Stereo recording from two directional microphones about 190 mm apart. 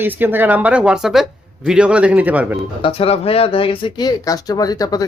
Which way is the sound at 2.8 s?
30° left (ahead or behind).